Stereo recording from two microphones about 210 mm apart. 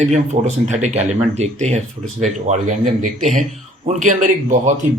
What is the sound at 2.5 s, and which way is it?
Speech, 35° right (ahead or behind).